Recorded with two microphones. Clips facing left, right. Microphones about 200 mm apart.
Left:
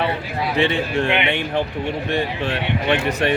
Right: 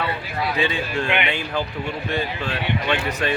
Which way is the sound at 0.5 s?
25° left (ahead or behind).